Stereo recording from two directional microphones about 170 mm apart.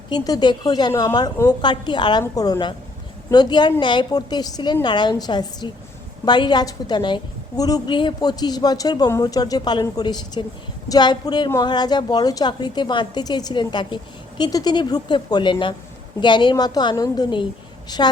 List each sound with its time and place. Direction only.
0.1 s a woman's voice: 25° left (ahead or behind)